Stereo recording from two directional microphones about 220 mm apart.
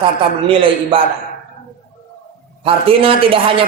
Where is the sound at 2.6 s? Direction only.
25° right (ahead or behind).